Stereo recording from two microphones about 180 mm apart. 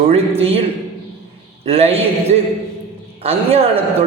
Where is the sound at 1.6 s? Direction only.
35° right (ahead or behind).